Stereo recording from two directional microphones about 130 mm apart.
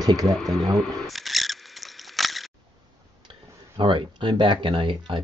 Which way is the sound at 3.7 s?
40° right (ahead or behind).